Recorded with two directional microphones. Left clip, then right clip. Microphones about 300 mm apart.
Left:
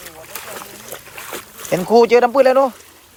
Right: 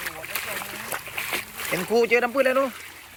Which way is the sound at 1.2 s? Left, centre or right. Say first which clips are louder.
Right 2 dB; centre.